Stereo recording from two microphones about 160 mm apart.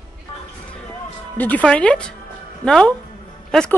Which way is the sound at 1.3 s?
10° left (ahead or behind).